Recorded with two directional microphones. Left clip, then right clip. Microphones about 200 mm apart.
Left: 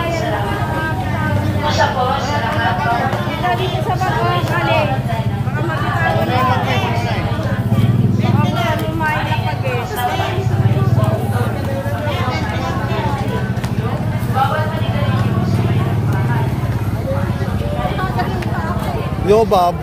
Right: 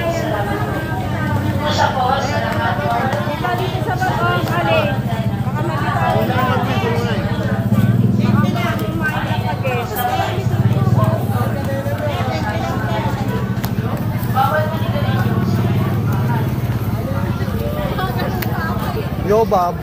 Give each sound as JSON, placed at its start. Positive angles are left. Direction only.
{"t": 19.2, "sound": "music", "side_deg": 30}